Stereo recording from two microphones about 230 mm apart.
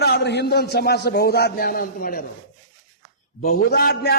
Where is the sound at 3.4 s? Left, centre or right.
Left.